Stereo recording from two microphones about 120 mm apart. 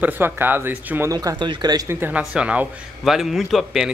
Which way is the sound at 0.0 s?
15° right (ahead or behind).